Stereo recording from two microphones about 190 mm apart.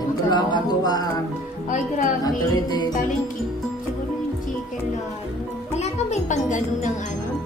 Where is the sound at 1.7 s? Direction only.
40° left (ahead or behind).